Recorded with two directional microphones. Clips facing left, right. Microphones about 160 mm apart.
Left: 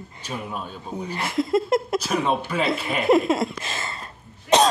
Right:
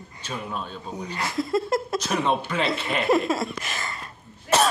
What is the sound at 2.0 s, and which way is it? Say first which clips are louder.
A man's voice: left 1 dB; 5° left (ahead or behind).